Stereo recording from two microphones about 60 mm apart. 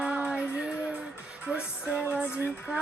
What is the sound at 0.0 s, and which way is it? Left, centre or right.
Female singing, right.